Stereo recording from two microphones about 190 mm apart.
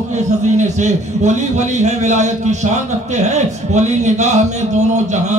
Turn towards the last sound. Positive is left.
turn(degrees=-40)  # may be behind; listen again after turning